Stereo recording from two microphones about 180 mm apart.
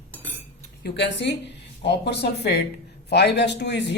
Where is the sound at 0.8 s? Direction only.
70° left (ahead or behind).